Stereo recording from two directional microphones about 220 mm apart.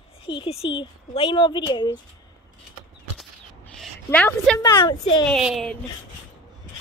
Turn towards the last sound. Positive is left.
turn(degrees=0)  # may be behind; listen again after turning